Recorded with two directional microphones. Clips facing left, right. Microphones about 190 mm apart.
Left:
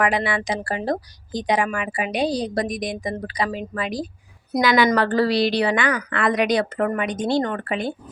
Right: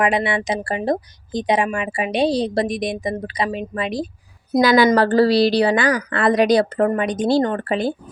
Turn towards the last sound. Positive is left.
turn(degrees=-35)  # may be behind; listen again after turning